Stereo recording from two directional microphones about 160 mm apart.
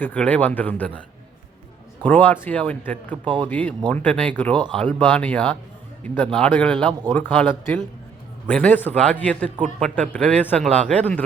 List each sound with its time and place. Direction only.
0.0 s a man's voice: 10° left (ahead or behind)
2.0 s a man's voice: 10° left (ahead or behind)
3.2 s speech: 30° right (ahead or behind)
3.5 s a man's voice: 10° left (ahead or behind)